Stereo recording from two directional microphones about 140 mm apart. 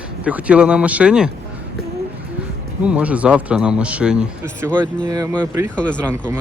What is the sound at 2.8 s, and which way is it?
Speech, 10° right (ahead or behind).